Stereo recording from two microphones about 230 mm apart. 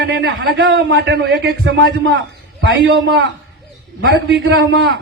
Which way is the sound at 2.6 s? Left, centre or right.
Right.